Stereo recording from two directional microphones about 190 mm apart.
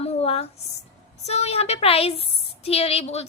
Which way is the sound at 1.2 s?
35° left (ahead or behind).